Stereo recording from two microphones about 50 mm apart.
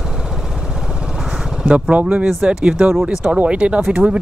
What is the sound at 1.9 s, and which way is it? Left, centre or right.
Speech, right.